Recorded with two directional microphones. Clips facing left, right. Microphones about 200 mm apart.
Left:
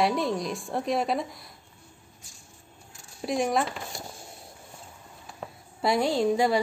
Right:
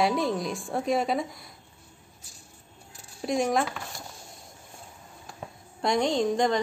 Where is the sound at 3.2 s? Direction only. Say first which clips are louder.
Right 1 dB; centre (ahead or behind).